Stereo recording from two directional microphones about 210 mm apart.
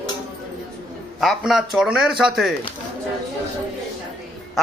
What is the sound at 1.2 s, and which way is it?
A man's voice, centre (ahead or behind).